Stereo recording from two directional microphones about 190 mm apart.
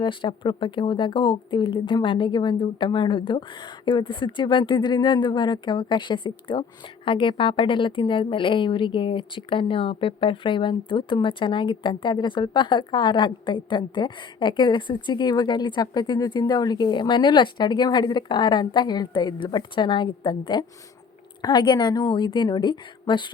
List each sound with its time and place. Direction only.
0.0 s speech: 25° left (ahead or behind)